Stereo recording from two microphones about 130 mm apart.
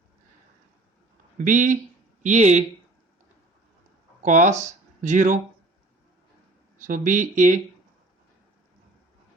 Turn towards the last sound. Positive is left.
turn(degrees=-70)  # may be behind; listen again after turning